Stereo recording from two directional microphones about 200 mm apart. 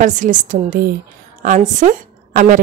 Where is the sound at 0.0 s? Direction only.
40° right (ahead or behind).